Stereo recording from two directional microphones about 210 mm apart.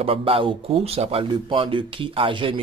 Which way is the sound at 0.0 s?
25° right (ahead or behind).